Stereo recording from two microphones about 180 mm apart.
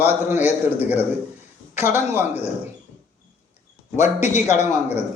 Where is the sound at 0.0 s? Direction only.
10° right (ahead or behind).